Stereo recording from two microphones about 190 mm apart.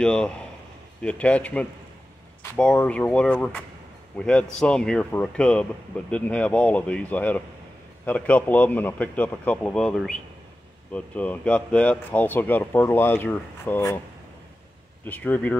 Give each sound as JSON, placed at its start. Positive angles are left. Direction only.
{"t": 0.0, "sound": "a man's voice", "side_deg": 5}
{"t": 15.0, "sound": "speech", "side_deg": 10}